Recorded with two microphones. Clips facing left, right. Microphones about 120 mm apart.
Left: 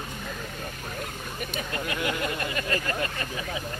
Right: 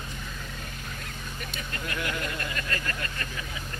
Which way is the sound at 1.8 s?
15° left (ahead or behind).